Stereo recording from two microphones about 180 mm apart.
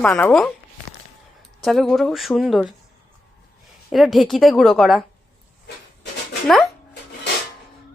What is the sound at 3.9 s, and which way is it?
Speech, centre (ahead or behind).